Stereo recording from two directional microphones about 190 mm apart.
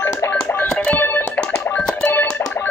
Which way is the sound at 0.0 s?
15° left (ahead or behind).